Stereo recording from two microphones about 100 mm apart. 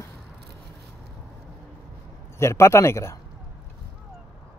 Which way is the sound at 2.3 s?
30° left (ahead or behind).